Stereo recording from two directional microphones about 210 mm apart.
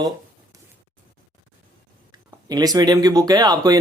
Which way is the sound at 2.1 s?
20° right (ahead or behind).